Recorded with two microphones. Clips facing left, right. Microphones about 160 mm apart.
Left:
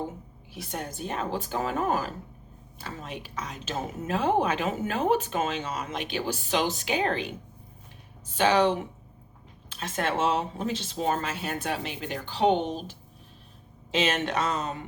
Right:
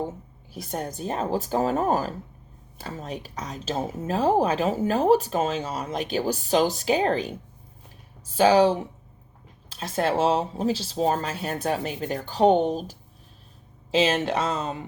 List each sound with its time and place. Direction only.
0.5 s speech: 40° right (ahead or behind)
8.4 s speech: 35° right (ahead or behind)